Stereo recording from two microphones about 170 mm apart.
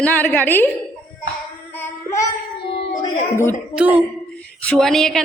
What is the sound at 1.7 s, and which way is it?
Child singing, 15° left (ahead or behind).